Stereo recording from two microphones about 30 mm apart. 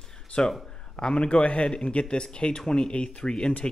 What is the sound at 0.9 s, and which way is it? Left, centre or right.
Speech, left.